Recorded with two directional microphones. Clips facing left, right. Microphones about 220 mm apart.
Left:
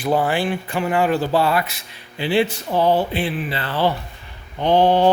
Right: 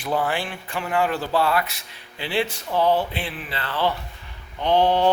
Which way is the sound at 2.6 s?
30° left (ahead or behind).